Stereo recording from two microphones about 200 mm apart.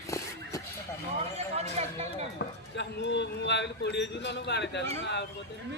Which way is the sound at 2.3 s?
60° left (ahead or behind).